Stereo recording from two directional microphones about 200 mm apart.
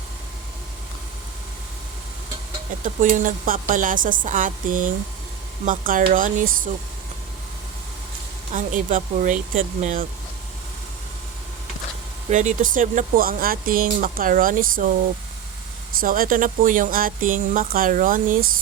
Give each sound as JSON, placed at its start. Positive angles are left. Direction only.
{"t": 2.8, "sound": "a woman's voice", "side_deg": -40}
{"t": 8.5, "sound": "a woman's voice", "side_deg": -40}
{"t": 12.3, "sound": "speech", "side_deg": -40}
{"t": 16.0, "sound": "speech", "side_deg": -45}